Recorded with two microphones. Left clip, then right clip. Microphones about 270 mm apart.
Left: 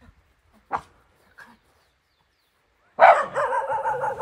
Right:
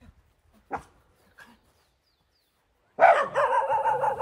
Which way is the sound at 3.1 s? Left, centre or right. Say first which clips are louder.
Left 2 dB; right.